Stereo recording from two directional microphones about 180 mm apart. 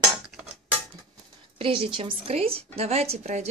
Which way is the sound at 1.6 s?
30° right (ahead or behind).